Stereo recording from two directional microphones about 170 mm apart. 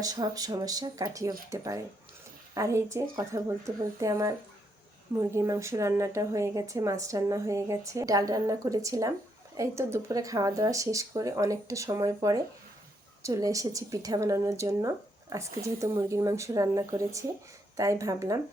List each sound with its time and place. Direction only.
0.0 s a woman's voice: 20° right (ahead or behind)